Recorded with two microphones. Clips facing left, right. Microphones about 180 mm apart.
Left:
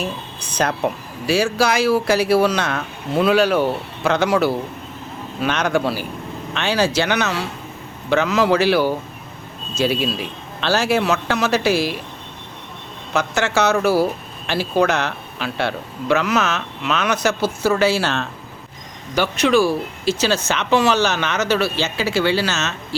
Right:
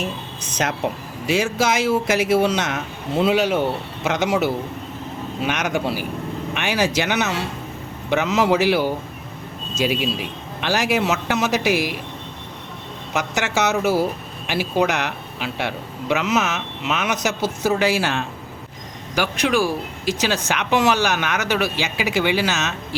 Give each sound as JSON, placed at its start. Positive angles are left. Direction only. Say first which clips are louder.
{"t": 1.3, "sound": "speech", "louder": "left 2 dB", "side_deg": -20}
{"t": 13.1, "sound": "speech", "louder": "left 3 dB", "side_deg": -15}